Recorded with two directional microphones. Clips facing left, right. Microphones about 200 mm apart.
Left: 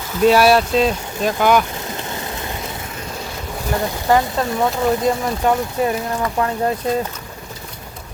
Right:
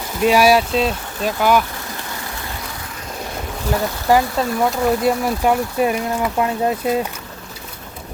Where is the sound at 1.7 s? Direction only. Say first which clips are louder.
Left 3 dB; 20° left (ahead or behind).